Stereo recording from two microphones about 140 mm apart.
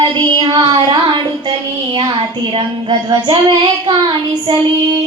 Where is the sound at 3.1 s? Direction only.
35° right (ahead or behind).